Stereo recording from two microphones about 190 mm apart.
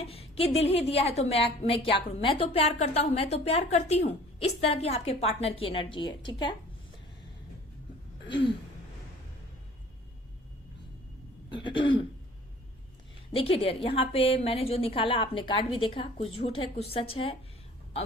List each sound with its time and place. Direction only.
0.0 s a woman's voice: 30° left (ahead or behind)
8.3 s a sound: 25° left (ahead or behind)
11.5 s a woman's voice: 25° left (ahead or behind)
13.3 s a woman's voice: 30° left (ahead or behind)